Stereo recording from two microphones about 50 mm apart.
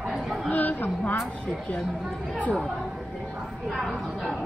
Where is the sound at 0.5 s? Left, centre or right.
Left.